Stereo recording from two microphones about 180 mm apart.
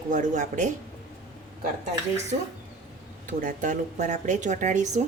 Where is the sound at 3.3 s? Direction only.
50° right (ahead or behind).